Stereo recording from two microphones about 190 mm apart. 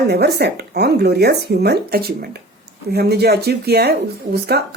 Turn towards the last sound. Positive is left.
turn(degrees=-55)  # may be behind; listen again after turning